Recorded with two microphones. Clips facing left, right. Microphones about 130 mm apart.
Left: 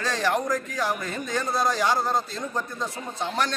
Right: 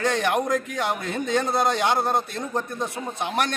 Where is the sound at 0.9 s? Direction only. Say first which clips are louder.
Right 5 dB; 65° right (ahead or behind).